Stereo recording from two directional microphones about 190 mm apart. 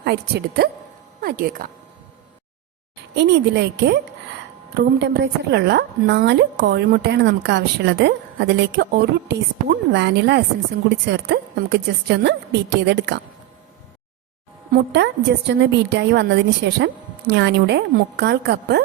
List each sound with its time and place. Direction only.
0.0 s a woman's voice: 60° right (ahead or behind)
3.2 s a woman's voice: 65° right (ahead or behind)
14.7 s a woman's voice: 65° right (ahead or behind)